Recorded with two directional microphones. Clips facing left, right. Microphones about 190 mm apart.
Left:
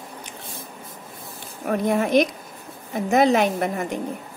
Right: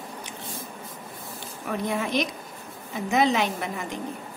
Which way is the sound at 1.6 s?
50° left (ahead or behind).